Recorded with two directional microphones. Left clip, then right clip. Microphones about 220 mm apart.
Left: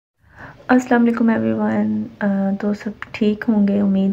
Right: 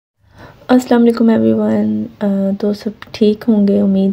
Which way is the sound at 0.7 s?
50° right (ahead or behind).